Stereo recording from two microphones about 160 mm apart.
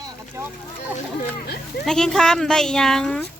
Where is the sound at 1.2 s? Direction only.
75° left (ahead or behind).